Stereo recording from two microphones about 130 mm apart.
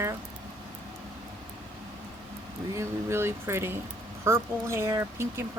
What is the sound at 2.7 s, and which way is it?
Speech, 20° right (ahead or behind).